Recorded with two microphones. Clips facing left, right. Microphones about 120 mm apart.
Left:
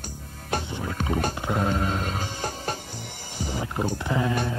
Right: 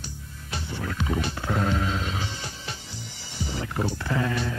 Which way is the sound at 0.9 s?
40° left (ahead or behind).